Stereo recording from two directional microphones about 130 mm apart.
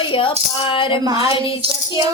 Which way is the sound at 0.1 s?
40° left (ahead or behind).